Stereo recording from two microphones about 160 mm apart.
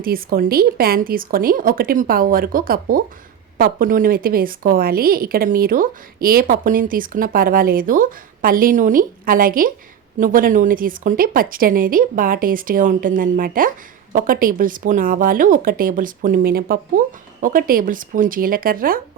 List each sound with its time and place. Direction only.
0.0 s a woman's voice: 65° right (ahead or behind)